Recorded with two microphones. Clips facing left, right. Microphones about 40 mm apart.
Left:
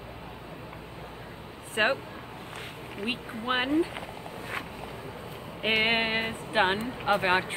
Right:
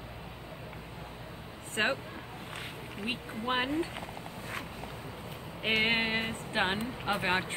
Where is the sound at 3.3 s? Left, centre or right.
Left.